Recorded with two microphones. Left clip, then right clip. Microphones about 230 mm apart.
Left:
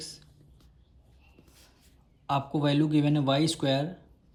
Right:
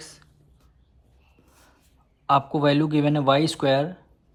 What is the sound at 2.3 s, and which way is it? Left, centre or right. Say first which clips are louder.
Speech: right 8 dB; right.